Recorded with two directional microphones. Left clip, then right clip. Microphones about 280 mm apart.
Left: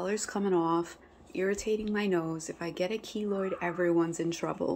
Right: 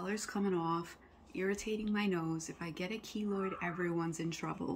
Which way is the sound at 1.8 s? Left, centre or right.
Centre.